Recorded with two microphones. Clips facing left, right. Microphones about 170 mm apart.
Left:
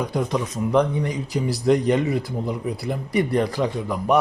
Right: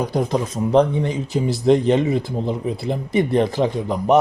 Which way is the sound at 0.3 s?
30° right (ahead or behind).